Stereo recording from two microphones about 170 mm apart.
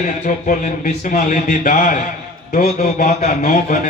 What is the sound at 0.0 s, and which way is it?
A man's voice, 50° left (ahead or behind).